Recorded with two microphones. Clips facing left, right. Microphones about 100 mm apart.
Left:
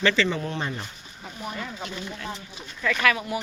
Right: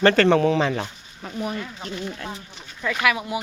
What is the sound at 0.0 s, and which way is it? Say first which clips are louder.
Speech: right 6 dB; 50° right (ahead or behind).